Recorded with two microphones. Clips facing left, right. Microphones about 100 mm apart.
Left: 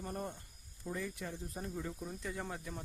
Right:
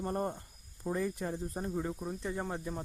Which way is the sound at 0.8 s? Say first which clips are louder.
Right 7 dB; 40° right (ahead or behind).